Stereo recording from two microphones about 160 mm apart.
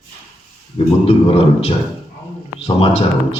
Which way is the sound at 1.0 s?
40° left (ahead or behind).